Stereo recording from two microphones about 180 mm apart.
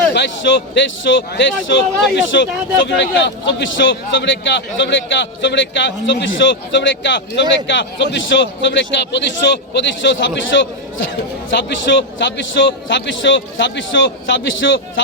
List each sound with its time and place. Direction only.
0.1 s a man's voice: 75° left (ahead or behind)